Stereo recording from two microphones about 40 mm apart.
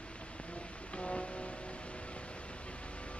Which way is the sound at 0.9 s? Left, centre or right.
Left.